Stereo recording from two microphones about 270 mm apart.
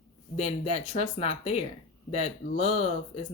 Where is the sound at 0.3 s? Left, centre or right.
Left.